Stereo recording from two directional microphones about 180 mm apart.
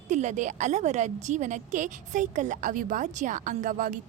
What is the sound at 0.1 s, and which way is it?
A woman's voice, 40° right (ahead or behind).